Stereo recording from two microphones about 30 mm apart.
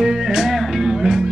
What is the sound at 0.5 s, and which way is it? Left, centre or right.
Music, centre.